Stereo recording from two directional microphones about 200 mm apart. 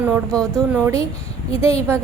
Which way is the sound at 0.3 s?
5° left (ahead or behind).